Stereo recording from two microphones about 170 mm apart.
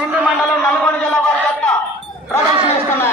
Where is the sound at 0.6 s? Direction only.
10° left (ahead or behind).